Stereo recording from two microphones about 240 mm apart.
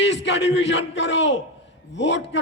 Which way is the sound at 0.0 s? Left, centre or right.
Left.